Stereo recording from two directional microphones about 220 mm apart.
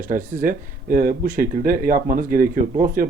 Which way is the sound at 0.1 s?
40° right (ahead or behind).